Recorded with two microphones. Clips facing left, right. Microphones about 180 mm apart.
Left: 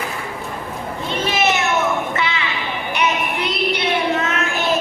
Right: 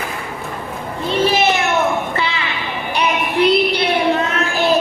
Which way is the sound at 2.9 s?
30° right (ahead or behind).